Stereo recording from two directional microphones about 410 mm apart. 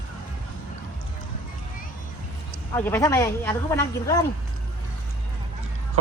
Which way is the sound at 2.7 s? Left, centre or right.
Centre.